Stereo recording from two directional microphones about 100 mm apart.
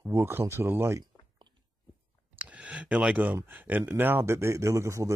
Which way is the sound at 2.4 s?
10° right (ahead or behind).